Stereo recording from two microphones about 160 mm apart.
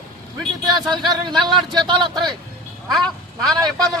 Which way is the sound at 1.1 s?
25° right (ahead or behind).